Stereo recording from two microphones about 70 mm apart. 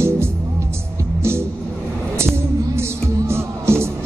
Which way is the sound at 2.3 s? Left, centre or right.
Right.